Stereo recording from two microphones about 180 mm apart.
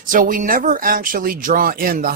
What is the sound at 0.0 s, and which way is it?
Speech, 50° right (ahead or behind).